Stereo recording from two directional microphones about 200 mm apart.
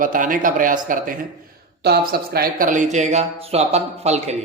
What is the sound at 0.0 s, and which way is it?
Speech, 40° right (ahead or behind).